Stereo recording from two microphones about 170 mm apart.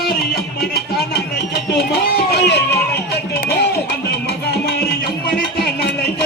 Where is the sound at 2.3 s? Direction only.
75° left (ahead or behind).